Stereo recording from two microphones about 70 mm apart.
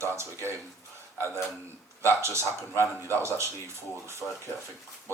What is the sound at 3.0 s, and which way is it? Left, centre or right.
Speech, right.